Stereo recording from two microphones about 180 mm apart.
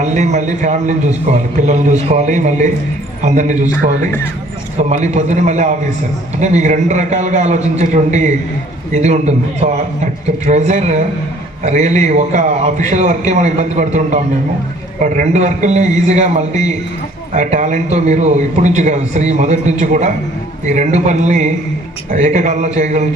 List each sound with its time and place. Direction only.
0.0 s a man's voice: 40° right (ahead or behind)
4.8 s a man's voice: 40° right (ahead or behind)